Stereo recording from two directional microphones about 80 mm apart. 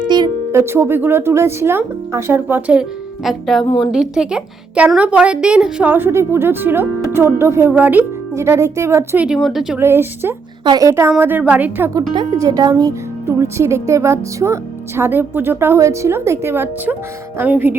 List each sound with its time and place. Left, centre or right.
0.5 s speech: right
2.6 s a woman's voice: centre
3.2 s speech: centre
3.8 s a woman's voice: centre
5.8 s speech: right
7.7 s speech: right
8.4 s speech: right
9.1 s a woman's voice: centre
9.4 s speech: centre
9.7 s speech: right
11.2 s speech: right
11.9 s speech: right
12.4 s speech: right
13.2 s speech: right